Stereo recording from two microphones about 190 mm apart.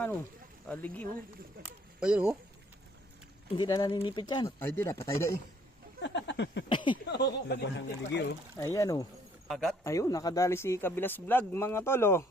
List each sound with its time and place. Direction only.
0.7 s speech: 10° left (ahead or behind)
2.0 s speech: 5° right (ahead or behind)
3.6 s speech: 20° left (ahead or behind)
6.0 s a sound: 70° left (ahead or behind)
6.7 s speech: 25° left (ahead or behind)
7.0 s speech: 60° left (ahead or behind)
8.5 s speech: 15° left (ahead or behind)
9.5 s speech: centre (ahead or behind)
9.8 s speech: 15° left (ahead or behind)